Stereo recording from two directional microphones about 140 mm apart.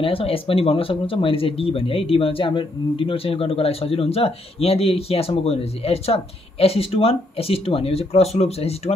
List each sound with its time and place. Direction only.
0.0 s speech: 40° left (ahead or behind)